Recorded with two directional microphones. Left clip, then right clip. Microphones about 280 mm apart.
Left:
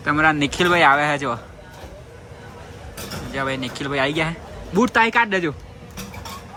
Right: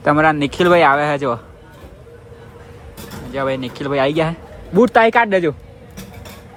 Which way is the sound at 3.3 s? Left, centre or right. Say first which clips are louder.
Right 4 dB; centre.